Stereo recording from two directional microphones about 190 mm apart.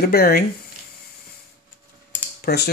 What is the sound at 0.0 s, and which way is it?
Speech, 55° left (ahead or behind).